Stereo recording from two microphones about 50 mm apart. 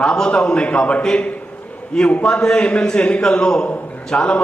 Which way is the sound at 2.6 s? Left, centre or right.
Left.